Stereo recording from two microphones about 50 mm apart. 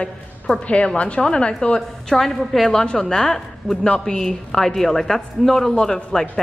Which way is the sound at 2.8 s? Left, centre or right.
Centre.